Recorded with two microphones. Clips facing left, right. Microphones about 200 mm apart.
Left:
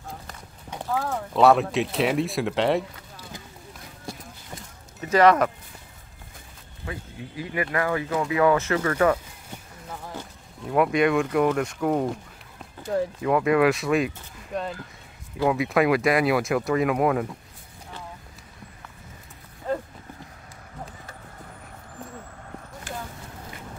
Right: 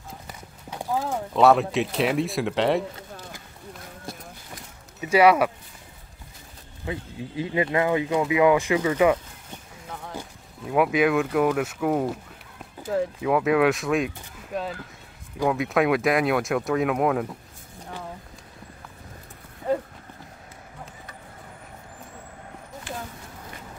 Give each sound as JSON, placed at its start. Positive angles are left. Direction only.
{"t": 0.3, "sound": "clip-clop", "side_deg": -10}
{"t": 1.3, "sound": "speech", "side_deg": 0}
{"t": 5.0, "sound": "speech", "side_deg": -10}
{"t": 6.9, "sound": "speech", "side_deg": -25}
{"t": 9.5, "sound": "a sound", "side_deg": 0}
{"t": 10.6, "sound": "speech", "side_deg": -5}